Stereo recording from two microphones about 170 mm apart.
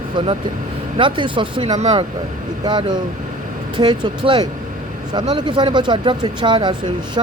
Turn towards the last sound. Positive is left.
turn(degrees=-25)  # may be behind; listen again after turning